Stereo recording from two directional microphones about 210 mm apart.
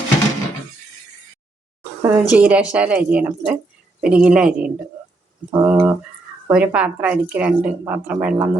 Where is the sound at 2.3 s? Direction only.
5° right (ahead or behind).